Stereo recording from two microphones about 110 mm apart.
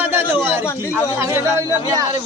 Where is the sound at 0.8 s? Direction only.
25° left (ahead or behind).